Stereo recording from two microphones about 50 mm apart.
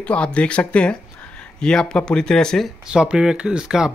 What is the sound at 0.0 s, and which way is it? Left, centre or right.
Speech, left.